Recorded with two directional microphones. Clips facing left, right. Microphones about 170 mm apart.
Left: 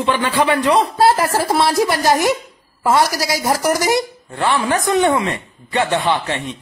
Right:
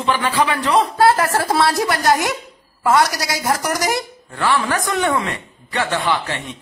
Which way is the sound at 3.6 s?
25° left (ahead or behind).